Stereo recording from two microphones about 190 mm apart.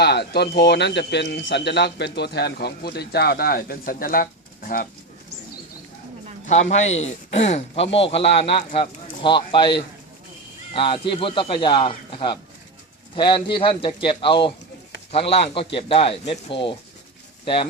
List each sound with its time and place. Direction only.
0.0 s speech: 60° left (ahead or behind)
6.4 s a man's voice: 40° left (ahead or behind)
7.8 s a man's voice: 70° left (ahead or behind)
8.0 s speech: 30° left (ahead or behind)